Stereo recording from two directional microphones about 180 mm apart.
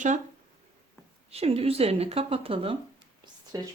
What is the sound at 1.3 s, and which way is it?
Speech, 35° right (ahead or behind).